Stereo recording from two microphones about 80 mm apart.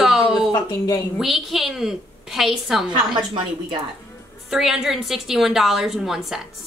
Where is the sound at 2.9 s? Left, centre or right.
Right.